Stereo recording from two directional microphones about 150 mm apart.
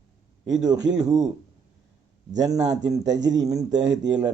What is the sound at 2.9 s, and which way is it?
Speech, 25° right (ahead or behind).